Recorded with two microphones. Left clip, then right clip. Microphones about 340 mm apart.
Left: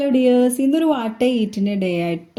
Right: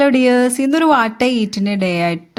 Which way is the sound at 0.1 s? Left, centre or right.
Right.